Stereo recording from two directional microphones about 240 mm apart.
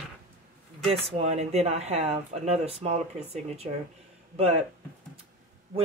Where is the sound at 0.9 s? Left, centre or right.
Right.